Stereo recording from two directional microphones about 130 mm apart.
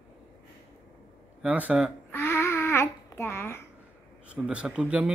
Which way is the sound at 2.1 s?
15° left (ahead or behind).